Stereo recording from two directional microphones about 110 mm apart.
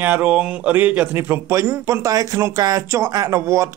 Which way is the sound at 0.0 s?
15° right (ahead or behind).